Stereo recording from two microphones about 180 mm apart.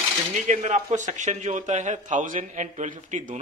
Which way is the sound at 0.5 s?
40° right (ahead or behind).